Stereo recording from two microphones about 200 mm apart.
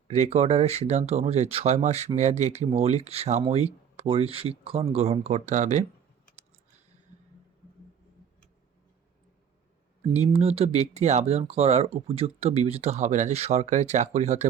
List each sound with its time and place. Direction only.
0.1 s speech: 35° right (ahead or behind)
10.1 s speech: 30° right (ahead or behind)